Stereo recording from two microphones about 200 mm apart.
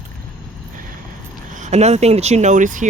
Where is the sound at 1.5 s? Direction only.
35° right (ahead or behind).